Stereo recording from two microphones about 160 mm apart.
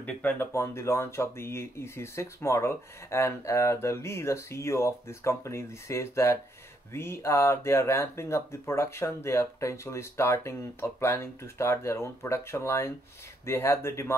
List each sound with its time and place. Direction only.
0.0 s speech: 10° left (ahead or behind)